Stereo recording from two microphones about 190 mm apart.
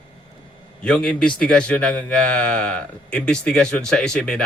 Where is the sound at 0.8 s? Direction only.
5° left (ahead or behind).